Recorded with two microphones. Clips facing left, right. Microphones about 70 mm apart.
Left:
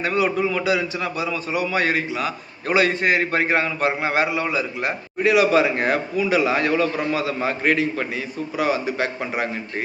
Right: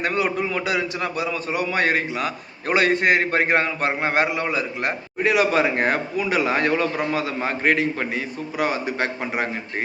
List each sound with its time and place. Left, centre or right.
0.0 s a man's voice: right